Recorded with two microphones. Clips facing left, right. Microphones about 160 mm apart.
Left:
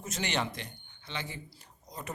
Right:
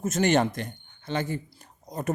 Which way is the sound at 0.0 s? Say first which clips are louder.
Right 11 dB; 45° right (ahead or behind).